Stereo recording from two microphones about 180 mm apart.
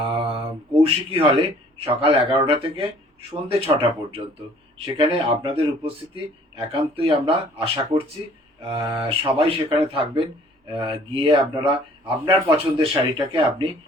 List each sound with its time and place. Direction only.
0.0 s speech: 30° right (ahead or behind)